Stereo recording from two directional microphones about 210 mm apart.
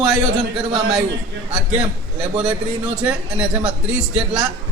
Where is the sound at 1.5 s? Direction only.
5° right (ahead or behind).